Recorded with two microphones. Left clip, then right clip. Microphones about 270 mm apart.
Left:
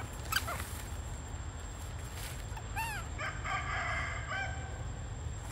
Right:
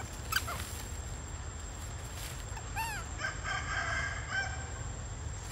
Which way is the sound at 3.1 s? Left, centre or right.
Left.